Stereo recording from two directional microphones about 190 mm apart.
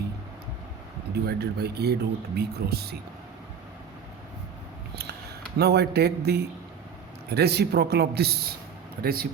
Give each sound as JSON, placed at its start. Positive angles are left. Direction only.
{"t": 1.1, "sound": "speech", "side_deg": -55}
{"t": 4.9, "sound": "speech", "side_deg": -60}